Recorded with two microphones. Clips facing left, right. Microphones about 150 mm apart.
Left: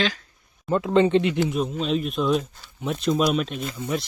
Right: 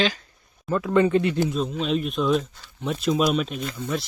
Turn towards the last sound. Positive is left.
turn(degrees=15)  # may be behind; listen again after turning